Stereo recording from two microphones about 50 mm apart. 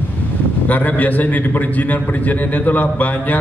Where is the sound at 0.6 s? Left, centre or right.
Left.